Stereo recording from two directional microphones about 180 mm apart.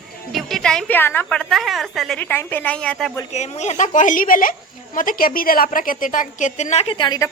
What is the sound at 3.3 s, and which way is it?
A woman's voice, 40° left (ahead or behind).